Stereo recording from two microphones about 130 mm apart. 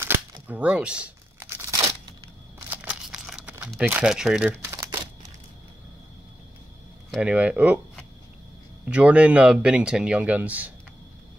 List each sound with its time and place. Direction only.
0.0 s crumpling: 15° right (ahead or behind)
2.7 s a sound: 10° right (ahead or behind)
3.8 s speech: 10° right (ahead or behind)
4.6 s crumpling: 25° right (ahead or behind)
7.2 s speech: 10° right (ahead or behind)
8.8 s speech: 10° right (ahead or behind)